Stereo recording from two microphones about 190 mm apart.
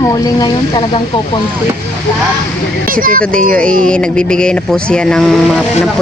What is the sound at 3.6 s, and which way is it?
Speech, 5° left (ahead or behind).